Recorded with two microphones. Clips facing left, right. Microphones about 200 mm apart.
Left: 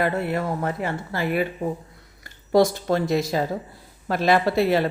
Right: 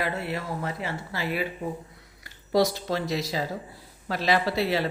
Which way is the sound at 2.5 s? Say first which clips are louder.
Left 5 dB; 50° left (ahead or behind).